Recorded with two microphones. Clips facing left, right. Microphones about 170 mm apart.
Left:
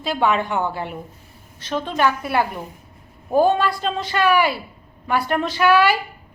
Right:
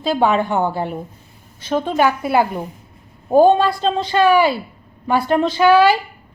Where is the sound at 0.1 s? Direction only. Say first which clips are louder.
Right 4 dB; 35° right (ahead or behind).